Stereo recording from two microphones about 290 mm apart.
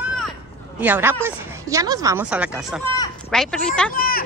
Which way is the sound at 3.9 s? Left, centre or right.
Left.